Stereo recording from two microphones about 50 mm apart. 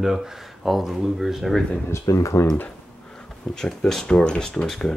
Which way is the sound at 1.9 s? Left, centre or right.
Left.